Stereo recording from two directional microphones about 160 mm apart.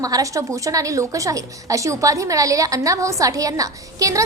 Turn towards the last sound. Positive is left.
turn(degrees=-20)  # may be behind; listen again after turning